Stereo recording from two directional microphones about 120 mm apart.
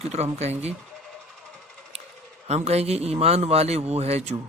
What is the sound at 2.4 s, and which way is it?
A man's voice, 65° right (ahead or behind).